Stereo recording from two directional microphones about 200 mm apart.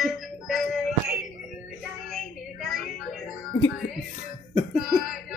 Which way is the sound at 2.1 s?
Centre (ahead or behind).